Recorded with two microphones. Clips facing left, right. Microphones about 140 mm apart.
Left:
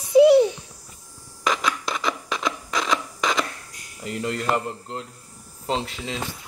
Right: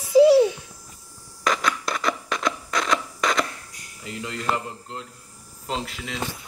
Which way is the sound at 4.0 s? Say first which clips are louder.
Left 5 dB; 40° left (ahead or behind).